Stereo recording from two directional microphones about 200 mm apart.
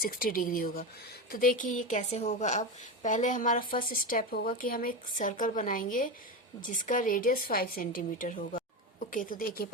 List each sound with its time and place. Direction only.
0.0 s a woman's voice: 45° left (ahead or behind)